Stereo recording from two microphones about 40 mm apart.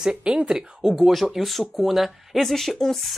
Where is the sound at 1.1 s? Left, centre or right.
Centre.